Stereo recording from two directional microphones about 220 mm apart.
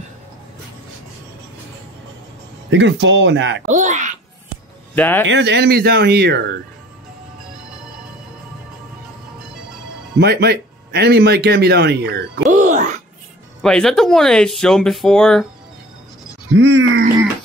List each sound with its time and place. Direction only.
2.7 s speech: 55° right (ahead or behind)
3.6 s a child's voice: 35° right (ahead or behind)
4.9 s speech: 10° left (ahead or behind)
5.2 s speech: 55° right (ahead or behind)
10.1 s speech: 45° right (ahead or behind)
12.4 s music: 35° right (ahead or behind)
13.6 s speech: 5° left (ahead or behind)
16.5 s speech: 60° right (ahead or behind)